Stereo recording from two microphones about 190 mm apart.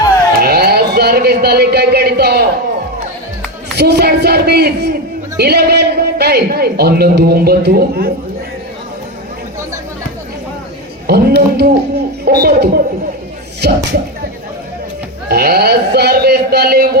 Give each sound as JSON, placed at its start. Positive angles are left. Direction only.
{"t": 0.4, "sound": "a sound", "side_deg": -55}
{"t": 3.8, "sound": "a man's voice", "side_deg": -60}
{"t": 11.0, "sound": "a man's voice", "side_deg": -55}
{"t": 15.3, "sound": "a man's voice", "side_deg": -55}